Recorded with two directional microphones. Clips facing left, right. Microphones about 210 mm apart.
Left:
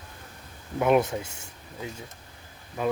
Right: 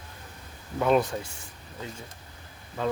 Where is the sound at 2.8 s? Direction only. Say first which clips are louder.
Left 2 dB; 10° left (ahead or behind).